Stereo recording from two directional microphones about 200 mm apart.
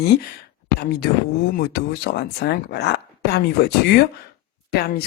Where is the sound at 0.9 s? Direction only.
50° left (ahead or behind).